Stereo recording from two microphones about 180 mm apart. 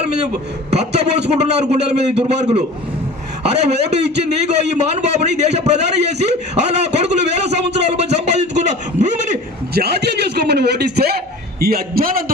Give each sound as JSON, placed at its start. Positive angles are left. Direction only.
{"t": 0.7, "sound": "a man's voice", "side_deg": -35}
{"t": 9.8, "sound": "a man's voice", "side_deg": -65}